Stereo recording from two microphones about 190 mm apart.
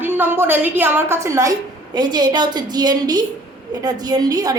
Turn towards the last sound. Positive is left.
turn(degrees=-20)  # may be behind; listen again after turning